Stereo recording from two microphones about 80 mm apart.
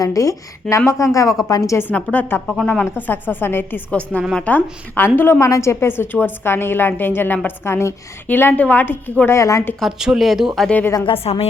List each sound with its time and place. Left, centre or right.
0.0 s a woman's voice: left
1.8 s a woman's voice: centre
2.5 s a woman's voice: left
5.4 s a woman's voice: left
9.3 s a woman's voice: left
9.8 s speech: centre
10.7 s a woman's voice: left